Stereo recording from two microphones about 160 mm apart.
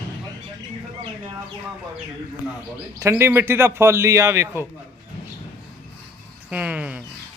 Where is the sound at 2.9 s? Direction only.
15° right (ahead or behind).